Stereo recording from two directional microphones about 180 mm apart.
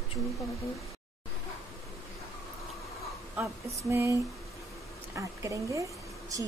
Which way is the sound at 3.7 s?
15° right (ahead or behind).